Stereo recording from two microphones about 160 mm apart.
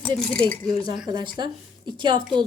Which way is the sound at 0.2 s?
5° left (ahead or behind).